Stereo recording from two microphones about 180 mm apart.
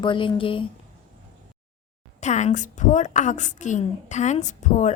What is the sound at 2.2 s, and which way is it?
A woman's voice, 40° left (ahead or behind).